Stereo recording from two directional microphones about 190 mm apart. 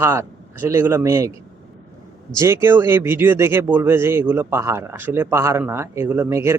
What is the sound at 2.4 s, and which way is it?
Speech, 15° right (ahead or behind).